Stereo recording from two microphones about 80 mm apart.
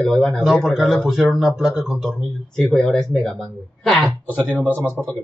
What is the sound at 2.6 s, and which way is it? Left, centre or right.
Speech, centre.